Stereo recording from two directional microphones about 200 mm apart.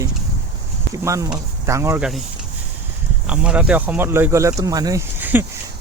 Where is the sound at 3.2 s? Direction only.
5° right (ahead or behind).